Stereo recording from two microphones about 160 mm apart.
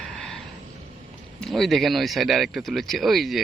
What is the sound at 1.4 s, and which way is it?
Speech, centre (ahead or behind).